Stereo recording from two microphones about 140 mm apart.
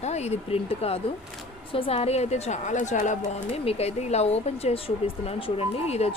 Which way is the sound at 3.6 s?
50° left (ahead or behind).